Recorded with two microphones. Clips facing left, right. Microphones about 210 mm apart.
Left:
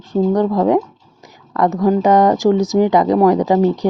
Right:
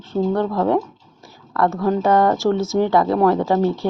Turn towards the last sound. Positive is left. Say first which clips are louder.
# left 4 dB
turn(degrees=15)  # may be behind; listen again after turning